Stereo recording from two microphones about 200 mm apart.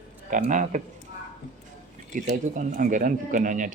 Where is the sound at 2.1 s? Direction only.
40° right (ahead or behind).